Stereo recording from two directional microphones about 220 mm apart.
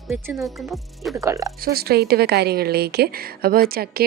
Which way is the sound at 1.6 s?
45° right (ahead or behind).